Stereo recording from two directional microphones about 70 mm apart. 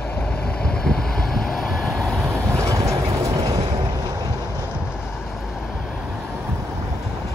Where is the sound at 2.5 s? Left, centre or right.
Right.